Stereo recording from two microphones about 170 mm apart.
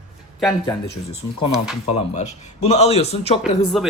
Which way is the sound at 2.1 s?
40° left (ahead or behind).